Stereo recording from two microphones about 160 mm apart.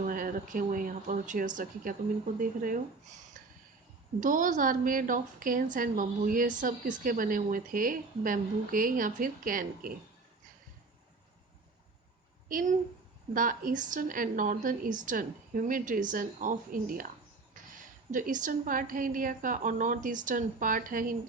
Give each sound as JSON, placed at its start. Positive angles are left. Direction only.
{"t": 0.0, "sound": "a woman's voice", "side_deg": -60}
{"t": 3.3, "sound": "a sound", "side_deg": -55}
{"t": 4.2, "sound": "a woman's voice", "side_deg": -55}
{"t": 12.5, "sound": "a woman's voice", "side_deg": -60}
{"t": 18.1, "sound": "a woman's voice", "side_deg": -55}